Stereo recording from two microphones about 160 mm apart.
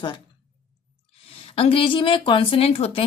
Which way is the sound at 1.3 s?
35° left (ahead or behind).